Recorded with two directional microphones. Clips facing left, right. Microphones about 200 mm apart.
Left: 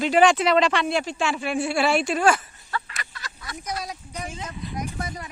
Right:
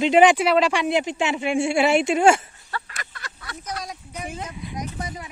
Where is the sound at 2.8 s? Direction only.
55° right (ahead or behind).